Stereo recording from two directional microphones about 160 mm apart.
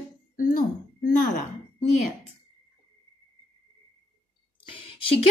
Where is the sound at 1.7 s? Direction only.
40° left (ahead or behind).